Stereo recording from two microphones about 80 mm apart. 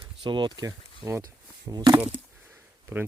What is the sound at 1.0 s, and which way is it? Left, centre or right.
Speech, right.